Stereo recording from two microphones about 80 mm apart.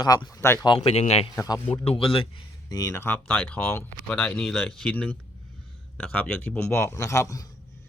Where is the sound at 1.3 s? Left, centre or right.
Left.